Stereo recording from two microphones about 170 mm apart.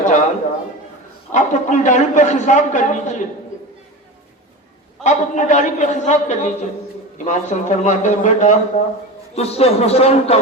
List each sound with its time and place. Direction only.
0.0 s a sound: 45° left (ahead or behind)
1.3 s a man's voice: 45° left (ahead or behind)
5.0 s a man's voice: 45° left (ahead or behind)